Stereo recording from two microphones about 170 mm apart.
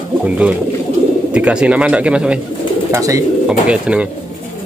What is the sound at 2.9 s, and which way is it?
Speech, 20° right (ahead or behind).